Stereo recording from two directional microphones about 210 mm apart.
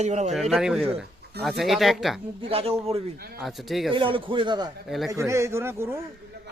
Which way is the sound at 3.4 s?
Centre (ahead or behind).